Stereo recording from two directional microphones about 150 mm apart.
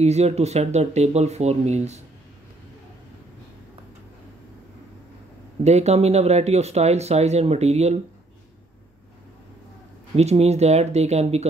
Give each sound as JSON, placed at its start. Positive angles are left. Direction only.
{"t": 0.0, "sound": "speech", "side_deg": -45}
{"t": 5.6, "sound": "speech", "side_deg": -45}
{"t": 10.1, "sound": "speech", "side_deg": -45}